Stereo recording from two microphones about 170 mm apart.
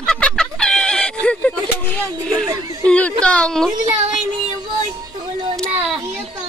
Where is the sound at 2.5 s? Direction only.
20° right (ahead or behind).